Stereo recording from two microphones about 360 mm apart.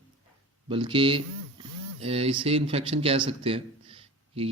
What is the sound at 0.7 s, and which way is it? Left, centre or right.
A man's voice, centre.